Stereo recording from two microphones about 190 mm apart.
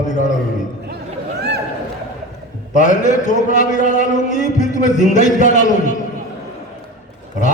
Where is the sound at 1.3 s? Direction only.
60° right (ahead or behind).